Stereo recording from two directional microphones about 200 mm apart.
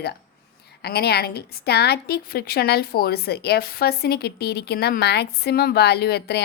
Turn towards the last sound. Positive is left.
turn(degrees=55)  # may be behind; listen again after turning